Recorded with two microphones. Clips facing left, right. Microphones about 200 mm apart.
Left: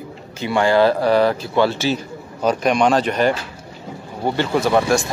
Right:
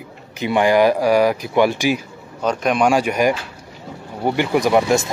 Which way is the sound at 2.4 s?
Centre (ahead or behind).